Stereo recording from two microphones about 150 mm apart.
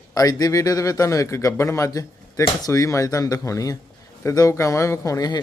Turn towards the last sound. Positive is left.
turn(degrees=25)  # may be behind; listen again after turning